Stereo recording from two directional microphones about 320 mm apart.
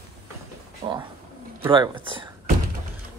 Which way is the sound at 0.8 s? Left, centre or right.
Centre.